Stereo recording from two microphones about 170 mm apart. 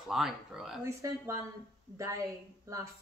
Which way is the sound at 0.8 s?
20° right (ahead or behind).